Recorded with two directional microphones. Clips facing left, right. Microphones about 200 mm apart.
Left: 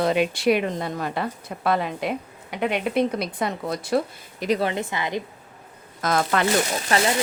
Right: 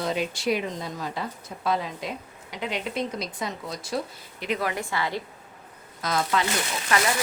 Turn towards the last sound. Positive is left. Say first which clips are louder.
# left 3 dB
turn(degrees=30)  # may be behind; listen again after turning